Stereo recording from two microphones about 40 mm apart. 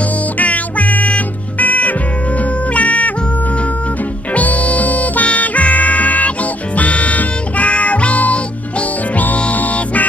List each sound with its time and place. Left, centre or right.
0.4 s music: left
4.3 s music: left